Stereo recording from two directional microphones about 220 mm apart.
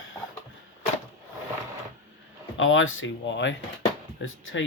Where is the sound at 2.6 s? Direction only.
60° left (ahead or behind).